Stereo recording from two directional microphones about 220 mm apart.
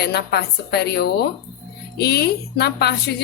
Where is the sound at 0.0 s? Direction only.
45° left (ahead or behind).